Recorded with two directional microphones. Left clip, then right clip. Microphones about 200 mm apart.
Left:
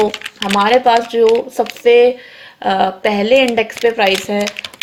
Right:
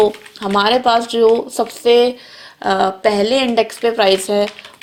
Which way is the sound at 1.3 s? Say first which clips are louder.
Left 1 dB; centre (ahead or behind).